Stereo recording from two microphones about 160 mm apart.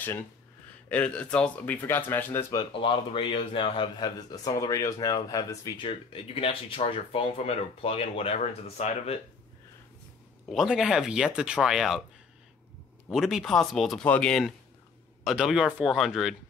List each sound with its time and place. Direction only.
0.8 s speech: 10° left (ahead or behind)
2.5 s speech: 35° left (ahead or behind)
10.5 s speech: 5° right (ahead or behind)
13.1 s speech: centre (ahead or behind)